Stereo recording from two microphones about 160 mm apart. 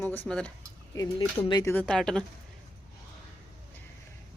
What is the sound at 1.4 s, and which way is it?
Speech, 30° left (ahead or behind).